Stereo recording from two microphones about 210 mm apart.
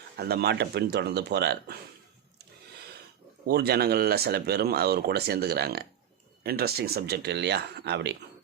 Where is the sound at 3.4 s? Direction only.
50° right (ahead or behind).